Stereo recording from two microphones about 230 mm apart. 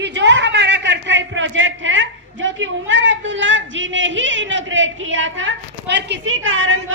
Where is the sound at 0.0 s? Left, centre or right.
Right.